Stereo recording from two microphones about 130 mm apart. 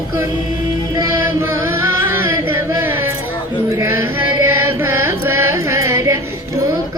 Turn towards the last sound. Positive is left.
turn(degrees=-20)  # may be behind; listen again after turning